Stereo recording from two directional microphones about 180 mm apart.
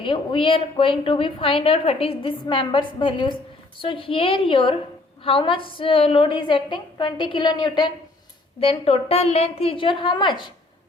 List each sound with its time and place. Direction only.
0.0 s a woman's voice: 30° left (ahead or behind)